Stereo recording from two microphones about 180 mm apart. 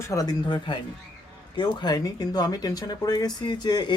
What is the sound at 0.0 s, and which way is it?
Speech, 20° left (ahead or behind).